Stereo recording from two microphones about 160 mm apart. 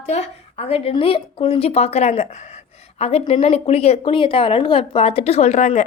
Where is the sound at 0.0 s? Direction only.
45° left (ahead or behind).